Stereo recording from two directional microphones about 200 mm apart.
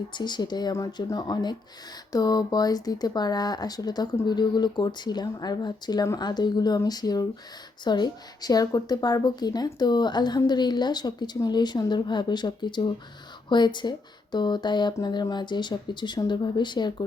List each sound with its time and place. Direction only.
0.1 s speech: 20° left (ahead or behind)